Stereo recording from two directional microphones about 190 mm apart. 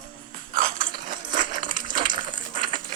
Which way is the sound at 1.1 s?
45° right (ahead or behind).